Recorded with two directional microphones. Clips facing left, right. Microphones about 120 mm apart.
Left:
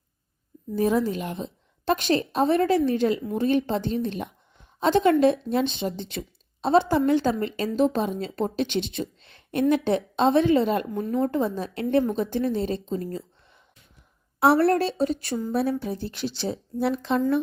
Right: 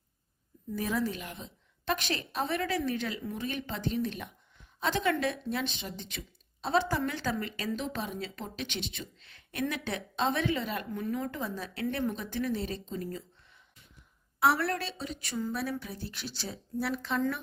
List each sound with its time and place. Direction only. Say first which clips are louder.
0.7 s a woman's voice: left 9 dB; 25° left (ahead or behind)
14.6 s speech: left 12 dB; 45° left (ahead or behind)
15.5 s a woman's voice: left 10 dB; 30° left (ahead or behind)